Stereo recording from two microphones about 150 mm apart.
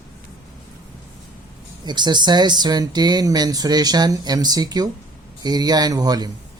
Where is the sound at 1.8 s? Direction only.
30° right (ahead or behind).